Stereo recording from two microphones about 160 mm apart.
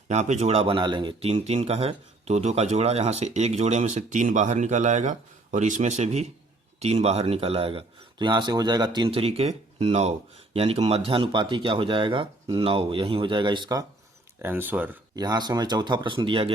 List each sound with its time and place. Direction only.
0.1 s speech: 45° right (ahead or behind); by 13.8 s 25° right (ahead or behind)
14.4 s speech: 10° right (ahead or behind)
15.1 s speech: 25° right (ahead or behind)